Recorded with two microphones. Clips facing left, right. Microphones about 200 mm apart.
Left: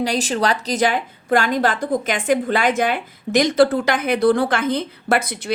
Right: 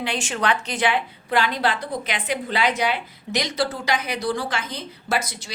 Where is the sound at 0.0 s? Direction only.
40° left (ahead or behind).